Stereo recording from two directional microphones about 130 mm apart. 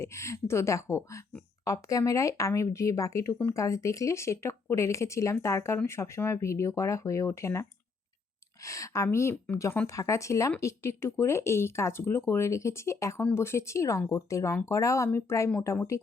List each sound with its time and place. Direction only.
0.0 s speech: 20° left (ahead or behind)